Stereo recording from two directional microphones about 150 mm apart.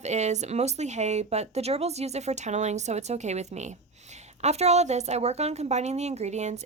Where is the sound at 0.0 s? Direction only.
50° right (ahead or behind).